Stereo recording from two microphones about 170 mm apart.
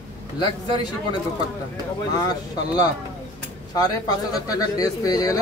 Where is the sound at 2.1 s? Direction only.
25° left (ahead or behind).